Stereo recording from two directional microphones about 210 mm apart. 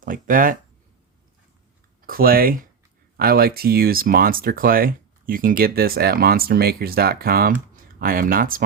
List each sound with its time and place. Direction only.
0.0 s speech: 40° right (ahead or behind)
2.0 s speech: 45° right (ahead or behind)